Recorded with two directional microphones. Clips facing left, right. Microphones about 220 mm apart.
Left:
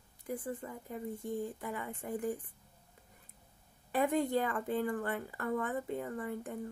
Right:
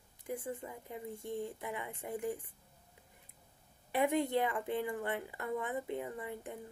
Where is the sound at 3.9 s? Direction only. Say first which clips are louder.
Left 1 dB; 20° right (ahead or behind).